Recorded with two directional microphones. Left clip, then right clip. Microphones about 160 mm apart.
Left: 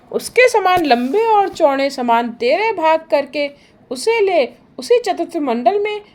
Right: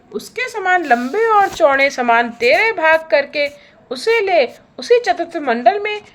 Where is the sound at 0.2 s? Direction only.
35° left (ahead or behind).